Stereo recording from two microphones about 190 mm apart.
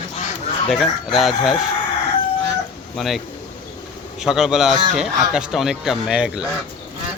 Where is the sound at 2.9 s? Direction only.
Centre (ahead or behind).